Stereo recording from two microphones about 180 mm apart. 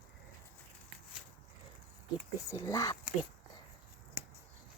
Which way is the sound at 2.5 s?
20° left (ahead or behind).